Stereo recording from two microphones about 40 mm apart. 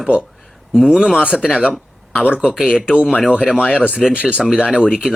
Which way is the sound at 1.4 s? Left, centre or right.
Right.